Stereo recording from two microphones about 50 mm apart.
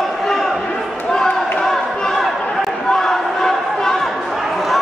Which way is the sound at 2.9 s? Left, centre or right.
Centre.